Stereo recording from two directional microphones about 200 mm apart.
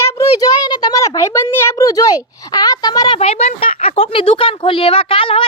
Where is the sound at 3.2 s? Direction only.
30° left (ahead or behind).